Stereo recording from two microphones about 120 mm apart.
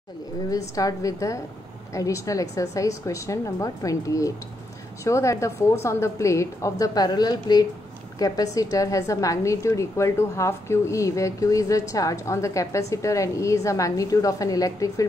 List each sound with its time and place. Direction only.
0.5 s a woman's voice: 30° left (ahead or behind)